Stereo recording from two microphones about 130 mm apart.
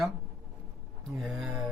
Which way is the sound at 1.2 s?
5° right (ahead or behind).